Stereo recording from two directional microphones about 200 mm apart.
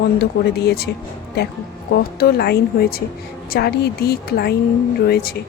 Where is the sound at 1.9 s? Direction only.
55° left (ahead or behind).